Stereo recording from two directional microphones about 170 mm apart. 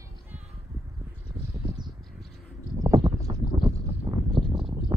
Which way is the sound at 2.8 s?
25° right (ahead or behind).